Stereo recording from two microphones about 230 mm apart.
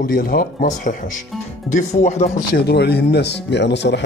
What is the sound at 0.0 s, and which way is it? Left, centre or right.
Speech, left.